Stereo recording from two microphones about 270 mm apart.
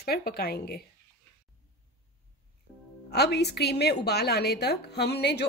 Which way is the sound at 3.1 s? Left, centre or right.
Left.